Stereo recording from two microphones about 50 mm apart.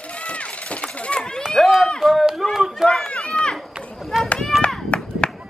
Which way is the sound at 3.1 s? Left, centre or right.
Centre.